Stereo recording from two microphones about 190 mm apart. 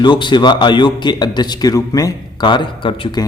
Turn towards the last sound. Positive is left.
turn(degrees=25)  # may be behind; listen again after turning